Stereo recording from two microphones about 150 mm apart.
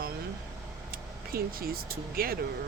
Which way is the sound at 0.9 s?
80° right.